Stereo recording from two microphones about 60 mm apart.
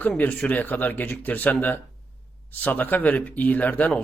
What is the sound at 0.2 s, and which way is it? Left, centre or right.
Speech, left.